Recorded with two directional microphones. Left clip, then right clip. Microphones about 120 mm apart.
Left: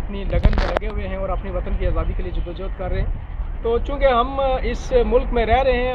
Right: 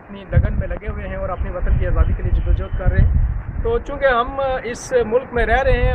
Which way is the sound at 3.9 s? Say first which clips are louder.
Right 1 dB; 15° left (ahead or behind).